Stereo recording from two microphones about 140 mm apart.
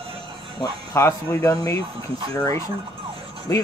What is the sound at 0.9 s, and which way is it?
Speech, 20° left (ahead or behind).